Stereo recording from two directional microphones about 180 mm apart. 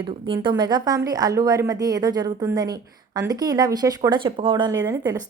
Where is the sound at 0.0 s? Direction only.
25° right (ahead or behind).